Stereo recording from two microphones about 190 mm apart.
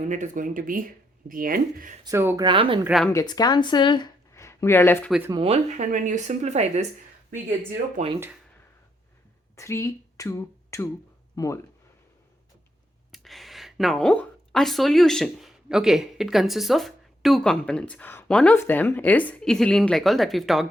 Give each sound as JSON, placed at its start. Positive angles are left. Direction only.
{"t": 0.1, "sound": "speech", "side_deg": -40}
{"t": 2.0, "sound": "speech", "side_deg": -15}
{"t": 2.8, "sound": "speech", "side_deg": 0}
{"t": 3.1, "sound": "speech", "side_deg": 20}
{"t": 5.3, "sound": "speech", "side_deg": -30}
{"t": 5.7, "sound": "speech", "side_deg": -40}
{"t": 8.0, "sound": "speech", "side_deg": -40}
{"t": 9.6, "sound": "speech", "side_deg": 15}
{"t": 13.1, "sound": "speech", "side_deg": 0}